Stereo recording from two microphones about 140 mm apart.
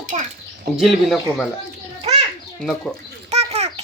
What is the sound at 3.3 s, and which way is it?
Bird, 50° right (ahead or behind).